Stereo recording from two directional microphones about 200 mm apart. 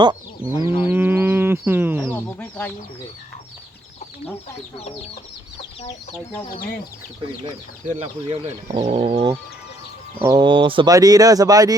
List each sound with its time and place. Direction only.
0.0 s fowl: 20° right (ahead or behind)
0.8 s livestock: 10° right (ahead or behind)
7.9 s speech: 30° right (ahead or behind)